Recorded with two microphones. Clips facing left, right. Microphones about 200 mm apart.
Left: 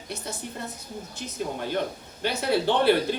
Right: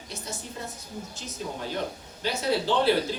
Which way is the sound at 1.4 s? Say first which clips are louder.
Left 4 dB; 60° left (ahead or behind).